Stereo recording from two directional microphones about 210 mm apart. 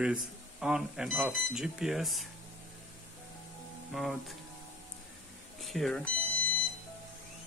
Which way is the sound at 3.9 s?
Centre (ahead or behind).